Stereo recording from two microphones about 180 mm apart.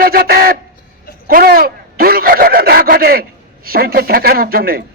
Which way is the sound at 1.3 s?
55° right (ahead or behind).